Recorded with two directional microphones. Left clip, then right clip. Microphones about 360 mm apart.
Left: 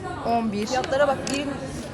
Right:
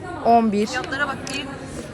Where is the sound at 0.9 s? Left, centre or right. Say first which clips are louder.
Left 4 dB; left.